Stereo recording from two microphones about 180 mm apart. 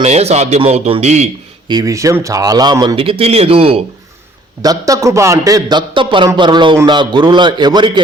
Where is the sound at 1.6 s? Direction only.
20° right (ahead or behind).